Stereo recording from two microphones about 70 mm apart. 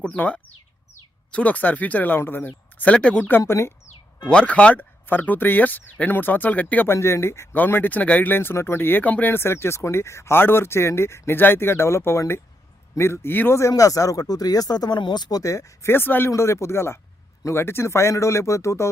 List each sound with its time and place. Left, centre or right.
1.3 s speech: centre
2.7 s speech: centre
3.2 s speech: left
4.3 s speech: centre
6.8 s speech: left
7.5 s speech: left
9.3 s speech: left
13.6 s speech: left
15.9 s speech: left
16.3 s speech: left